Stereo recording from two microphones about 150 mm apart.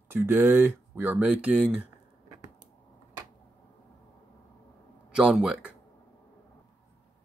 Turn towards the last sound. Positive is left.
turn(degrees=-5)  # may be behind; listen again after turning